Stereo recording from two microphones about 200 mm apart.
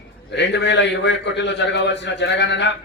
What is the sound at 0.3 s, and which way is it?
A man's voice, 60° left (ahead or behind).